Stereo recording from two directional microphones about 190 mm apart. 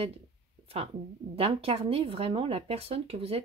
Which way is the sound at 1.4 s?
30° right (ahead or behind).